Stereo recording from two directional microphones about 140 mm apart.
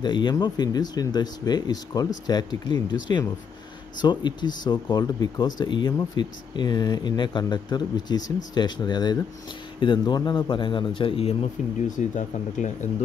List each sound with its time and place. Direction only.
0.0 s speech: 35° left (ahead or behind)
11.9 s speech: 60° left (ahead or behind)